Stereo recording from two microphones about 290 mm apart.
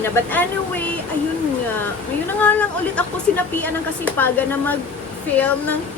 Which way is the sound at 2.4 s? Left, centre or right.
Centre.